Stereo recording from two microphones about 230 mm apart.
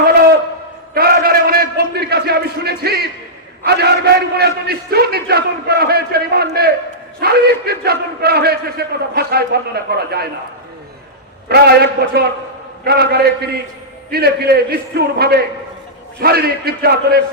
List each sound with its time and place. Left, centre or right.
0.9 s a sound: right
3.6 s a man's voice: right
11.4 s a man's voice: right